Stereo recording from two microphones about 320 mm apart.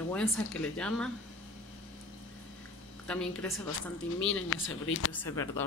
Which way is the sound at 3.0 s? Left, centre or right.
Centre.